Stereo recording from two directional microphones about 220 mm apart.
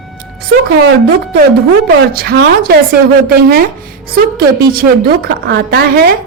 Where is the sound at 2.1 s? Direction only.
45° right (ahead or behind).